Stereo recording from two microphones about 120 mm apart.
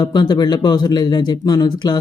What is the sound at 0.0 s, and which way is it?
Speech, 35° left (ahead or behind).